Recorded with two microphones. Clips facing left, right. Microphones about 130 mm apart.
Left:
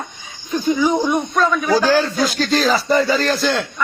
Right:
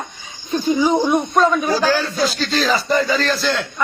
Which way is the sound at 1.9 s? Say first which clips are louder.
Left 3 dB; 15° left (ahead or behind).